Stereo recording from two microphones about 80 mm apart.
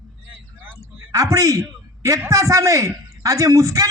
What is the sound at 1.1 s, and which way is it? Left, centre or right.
A man's voice, right.